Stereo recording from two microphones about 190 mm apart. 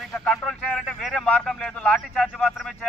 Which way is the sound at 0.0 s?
Centre (ahead or behind).